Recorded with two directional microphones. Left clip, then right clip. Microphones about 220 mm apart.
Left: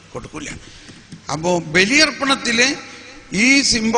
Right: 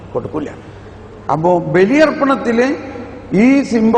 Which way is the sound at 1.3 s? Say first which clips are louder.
Right 7 dB; 20° left (ahead or behind).